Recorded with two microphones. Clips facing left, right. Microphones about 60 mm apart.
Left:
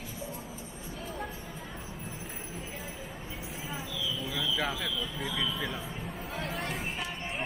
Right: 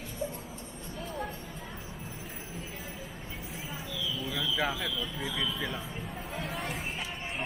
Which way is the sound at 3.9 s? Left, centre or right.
Centre.